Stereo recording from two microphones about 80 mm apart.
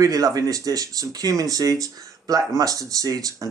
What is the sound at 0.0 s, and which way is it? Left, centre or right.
Speech, right.